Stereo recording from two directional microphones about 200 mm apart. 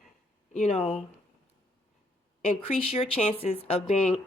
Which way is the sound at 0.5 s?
30° left (ahead or behind).